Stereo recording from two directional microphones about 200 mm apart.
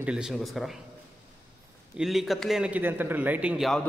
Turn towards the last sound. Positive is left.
turn(degrees=0)  # may be behind; listen again after turning